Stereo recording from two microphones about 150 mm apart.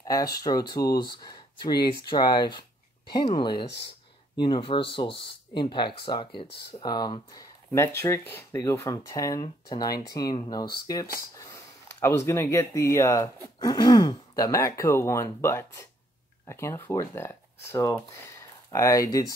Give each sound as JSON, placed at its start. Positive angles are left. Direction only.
{"t": 0.0, "sound": "speech", "side_deg": 25}
{"t": 7.7, "sound": "speech", "side_deg": 20}
{"t": 11.3, "sound": "a sound", "side_deg": 20}
{"t": 12.3, "sound": "speech", "side_deg": 20}